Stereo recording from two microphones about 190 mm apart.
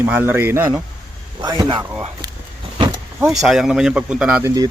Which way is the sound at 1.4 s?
20° right (ahead or behind).